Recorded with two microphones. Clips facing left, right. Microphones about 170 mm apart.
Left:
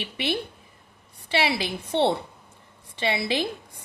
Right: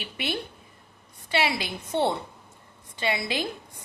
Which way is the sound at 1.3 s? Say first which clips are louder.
Left 2 dB; 25° left (ahead or behind).